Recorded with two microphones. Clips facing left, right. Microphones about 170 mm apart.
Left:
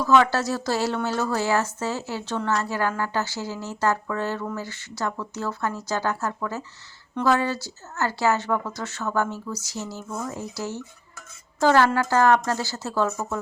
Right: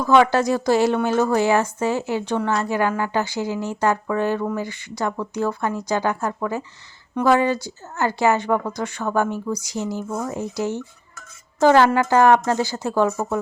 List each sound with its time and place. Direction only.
0.1 s a woman's voice: 15° right (ahead or behind)
10.1 s a woman's voice: 25° right (ahead or behind)